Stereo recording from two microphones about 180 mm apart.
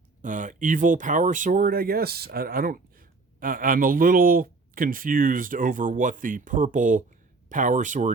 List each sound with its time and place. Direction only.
0.2 s speech: 45° right (ahead or behind)